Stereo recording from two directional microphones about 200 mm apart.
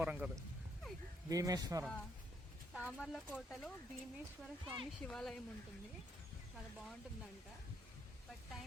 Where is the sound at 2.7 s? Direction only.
5° right (ahead or behind).